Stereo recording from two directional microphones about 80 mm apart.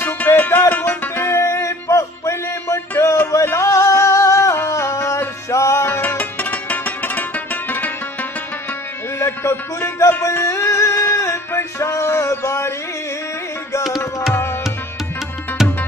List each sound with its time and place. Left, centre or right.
0.0 s music: left
3.0 s a sound: left
9.2 s music: left